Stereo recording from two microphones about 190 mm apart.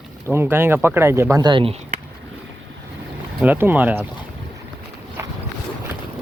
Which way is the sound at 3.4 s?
10° right (ahead or behind).